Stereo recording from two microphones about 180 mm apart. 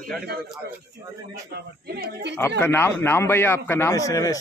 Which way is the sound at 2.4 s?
15° left (ahead or behind).